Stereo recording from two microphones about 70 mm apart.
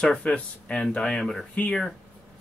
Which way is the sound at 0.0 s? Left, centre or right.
Centre.